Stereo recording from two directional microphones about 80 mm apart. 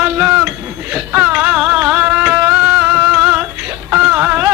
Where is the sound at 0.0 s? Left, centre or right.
Centre.